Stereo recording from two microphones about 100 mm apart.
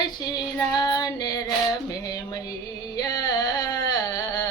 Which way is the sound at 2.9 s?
40° left (ahead or behind).